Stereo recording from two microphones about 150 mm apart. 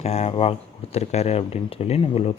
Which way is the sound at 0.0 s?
45° left (ahead or behind).